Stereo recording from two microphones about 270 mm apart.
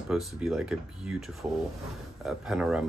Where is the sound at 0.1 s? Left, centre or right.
Centre.